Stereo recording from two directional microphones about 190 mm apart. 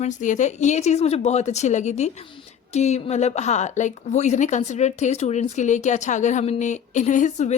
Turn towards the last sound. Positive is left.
turn(degrees=40)  # may be behind; listen again after turning